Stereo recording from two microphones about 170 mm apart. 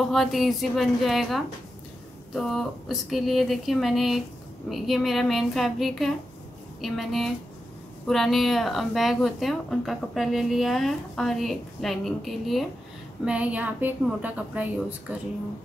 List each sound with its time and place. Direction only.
0.1 s a woman's voice: centre (ahead or behind)